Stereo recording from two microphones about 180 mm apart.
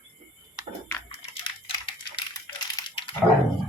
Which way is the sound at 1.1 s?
30° left (ahead or behind).